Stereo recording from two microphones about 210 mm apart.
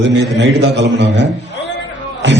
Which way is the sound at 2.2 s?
55° right (ahead or behind).